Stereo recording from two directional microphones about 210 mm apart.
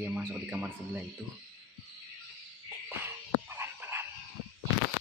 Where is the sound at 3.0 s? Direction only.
10° right (ahead or behind).